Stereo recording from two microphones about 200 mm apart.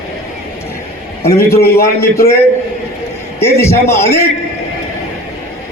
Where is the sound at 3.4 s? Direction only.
10° left (ahead or behind).